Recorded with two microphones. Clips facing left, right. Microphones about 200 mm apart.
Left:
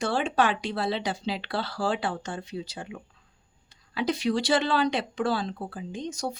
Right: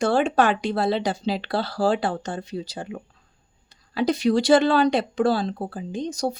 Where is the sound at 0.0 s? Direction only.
50° right (ahead or behind).